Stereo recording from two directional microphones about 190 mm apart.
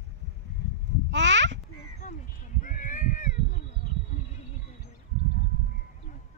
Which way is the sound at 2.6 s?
45° left (ahead or behind).